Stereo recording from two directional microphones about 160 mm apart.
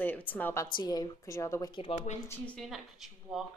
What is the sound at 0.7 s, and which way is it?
Speech, 25° left (ahead or behind).